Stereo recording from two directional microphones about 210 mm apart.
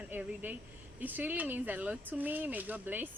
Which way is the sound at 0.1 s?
10° right (ahead or behind).